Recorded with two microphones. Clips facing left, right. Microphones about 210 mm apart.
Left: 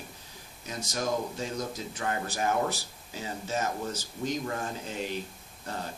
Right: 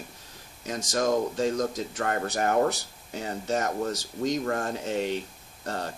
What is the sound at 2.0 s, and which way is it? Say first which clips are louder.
Speech: right 3 dB; 65° right (ahead or behind).